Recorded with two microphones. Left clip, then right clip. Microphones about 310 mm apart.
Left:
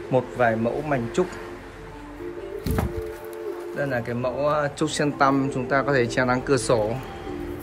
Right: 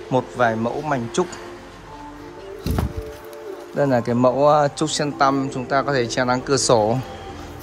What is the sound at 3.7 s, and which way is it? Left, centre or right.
Speech, centre.